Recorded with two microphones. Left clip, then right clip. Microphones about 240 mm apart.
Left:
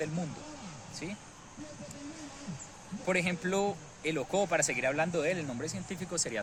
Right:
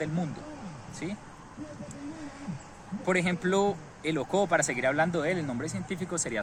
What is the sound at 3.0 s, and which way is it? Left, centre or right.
Speech, centre.